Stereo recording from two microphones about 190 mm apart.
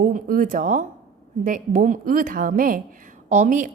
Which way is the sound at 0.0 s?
45° right (ahead or behind).